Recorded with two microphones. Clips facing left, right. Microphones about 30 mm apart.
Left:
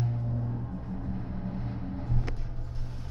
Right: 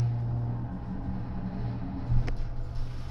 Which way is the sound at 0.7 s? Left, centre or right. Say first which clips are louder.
Even; centre.